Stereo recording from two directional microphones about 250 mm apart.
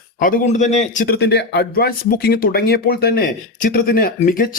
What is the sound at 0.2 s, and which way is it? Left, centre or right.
A man's voice, left.